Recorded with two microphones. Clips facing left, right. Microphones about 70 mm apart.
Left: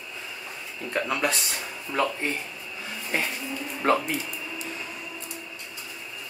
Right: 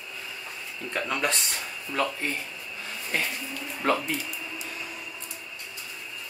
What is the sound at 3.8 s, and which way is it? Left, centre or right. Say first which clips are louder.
Speech: left 3 dB; left.